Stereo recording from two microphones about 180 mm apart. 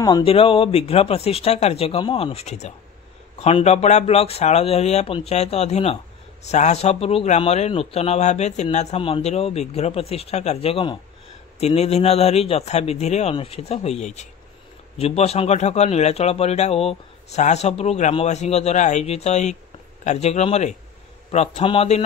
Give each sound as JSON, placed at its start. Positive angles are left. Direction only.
{"t": 0.0, "sound": "a man's voice", "side_deg": 25}